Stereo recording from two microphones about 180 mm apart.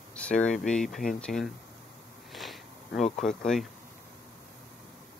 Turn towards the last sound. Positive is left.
turn(degrees=0)  # may be behind; listen again after turning